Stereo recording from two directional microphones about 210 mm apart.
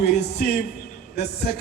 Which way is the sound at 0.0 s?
50° left (ahead or behind).